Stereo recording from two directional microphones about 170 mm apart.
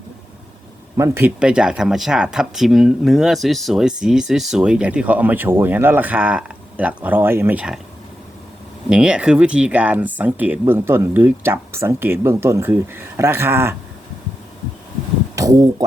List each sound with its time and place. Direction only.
0.9 s speech: 15° right (ahead or behind)
8.9 s speech: 5° right (ahead or behind)
15.4 s speech: 20° right (ahead or behind)